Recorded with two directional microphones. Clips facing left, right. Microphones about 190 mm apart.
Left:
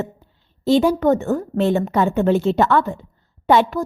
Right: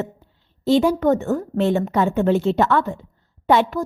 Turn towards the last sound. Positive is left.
turn(degrees=35)  # may be behind; listen again after turning